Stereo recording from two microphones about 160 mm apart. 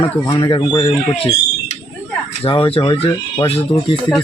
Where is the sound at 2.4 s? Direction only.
30° left (ahead or behind).